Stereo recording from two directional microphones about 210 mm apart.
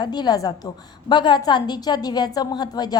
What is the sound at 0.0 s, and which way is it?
A woman's voice, 20° left (ahead or behind).